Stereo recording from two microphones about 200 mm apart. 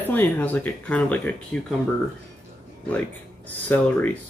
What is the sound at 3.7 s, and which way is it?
Speech, 10° left (ahead or behind).